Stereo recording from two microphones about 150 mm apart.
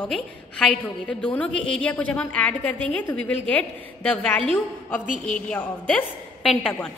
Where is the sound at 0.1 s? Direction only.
5° left (ahead or behind).